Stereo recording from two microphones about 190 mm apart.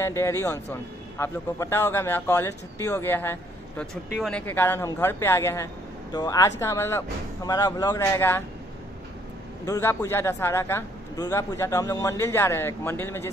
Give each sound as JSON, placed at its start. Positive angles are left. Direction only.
{"t": 0.0, "sound": "a man's voice", "side_deg": 15}
{"t": 9.7, "sound": "a man's voice", "side_deg": 15}